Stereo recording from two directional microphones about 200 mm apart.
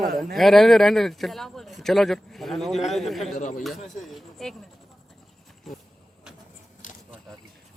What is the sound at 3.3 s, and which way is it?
Speech, 45° left (ahead or behind).